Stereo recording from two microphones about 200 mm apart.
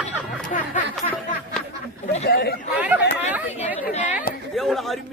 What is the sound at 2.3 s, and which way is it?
Speech, 55° left (ahead or behind).